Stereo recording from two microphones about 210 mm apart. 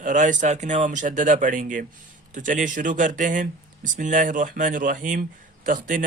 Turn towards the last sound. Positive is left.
turn(degrees=-40)  # may be behind; listen again after turning